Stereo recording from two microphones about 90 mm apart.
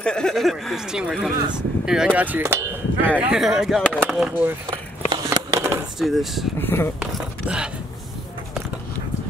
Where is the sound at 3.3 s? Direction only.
5° right (ahead or behind).